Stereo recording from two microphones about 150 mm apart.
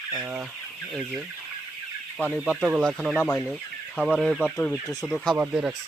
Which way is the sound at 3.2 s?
15° left (ahead or behind).